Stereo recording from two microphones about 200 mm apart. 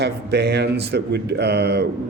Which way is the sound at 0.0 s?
55° right (ahead or behind).